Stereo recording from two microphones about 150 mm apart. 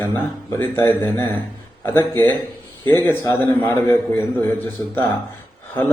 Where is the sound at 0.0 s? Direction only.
15° left (ahead or behind).